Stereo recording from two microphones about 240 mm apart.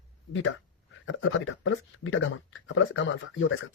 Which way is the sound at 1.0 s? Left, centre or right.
Left.